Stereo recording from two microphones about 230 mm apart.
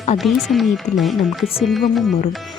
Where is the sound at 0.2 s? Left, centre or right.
Centre.